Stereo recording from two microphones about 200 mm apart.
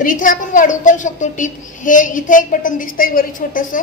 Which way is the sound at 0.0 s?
40° left (ahead or behind).